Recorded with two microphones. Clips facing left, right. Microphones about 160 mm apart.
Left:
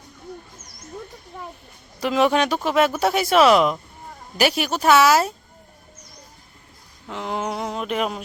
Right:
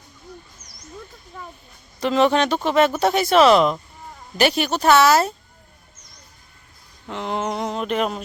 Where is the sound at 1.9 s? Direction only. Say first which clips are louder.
Right 1 dB; 10° left (ahead or behind).